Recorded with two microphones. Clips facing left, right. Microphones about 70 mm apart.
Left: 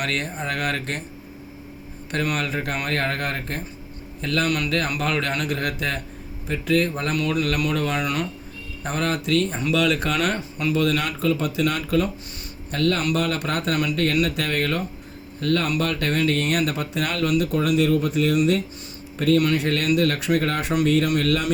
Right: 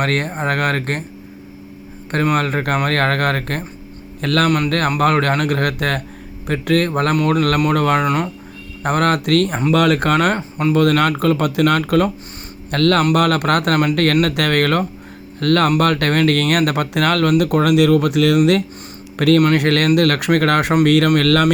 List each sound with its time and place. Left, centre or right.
0.0 s speech: right
2.0 s a man's voice: right
4.4 s speech: right
8.8 s speech: right
9.7 s speech: right
12.7 s speech: right
19.4 s speech: right